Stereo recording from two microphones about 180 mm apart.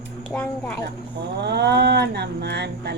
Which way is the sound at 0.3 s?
5° left (ahead or behind).